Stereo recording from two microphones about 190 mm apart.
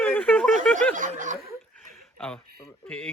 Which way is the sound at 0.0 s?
10° left (ahead or behind).